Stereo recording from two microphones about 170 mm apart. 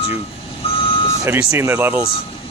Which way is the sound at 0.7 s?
30° left (ahead or behind).